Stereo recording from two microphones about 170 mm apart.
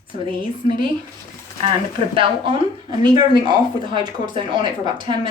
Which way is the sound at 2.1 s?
30° right (ahead or behind).